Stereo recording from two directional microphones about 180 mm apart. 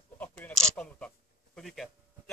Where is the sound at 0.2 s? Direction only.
10° left (ahead or behind).